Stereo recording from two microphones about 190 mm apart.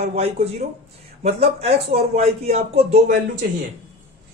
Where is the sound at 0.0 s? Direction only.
35° right (ahead or behind).